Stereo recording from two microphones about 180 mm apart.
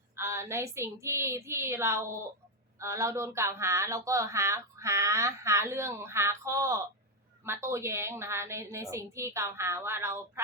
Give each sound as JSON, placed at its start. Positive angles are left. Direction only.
{"t": 0.2, "sound": "speech", "side_deg": -15}